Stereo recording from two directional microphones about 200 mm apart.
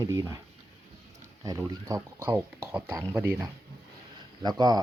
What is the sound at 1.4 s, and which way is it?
Speech, 15° right (ahead or behind).